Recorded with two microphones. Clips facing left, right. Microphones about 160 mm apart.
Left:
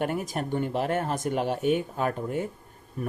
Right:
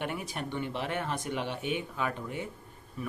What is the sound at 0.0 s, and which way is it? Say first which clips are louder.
Speech: left 7 dB; 45° left (ahead or behind).